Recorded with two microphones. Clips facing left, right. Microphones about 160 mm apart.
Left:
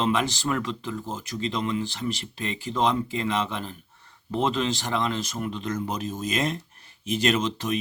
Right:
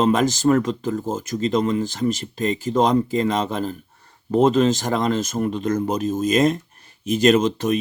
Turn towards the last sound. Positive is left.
turn(degrees=-45)  # may be behind; listen again after turning